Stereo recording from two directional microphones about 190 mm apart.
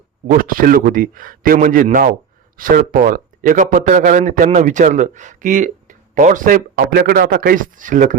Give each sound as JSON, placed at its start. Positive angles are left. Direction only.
{"t": 0.3, "sound": "a man's voice", "side_deg": -45}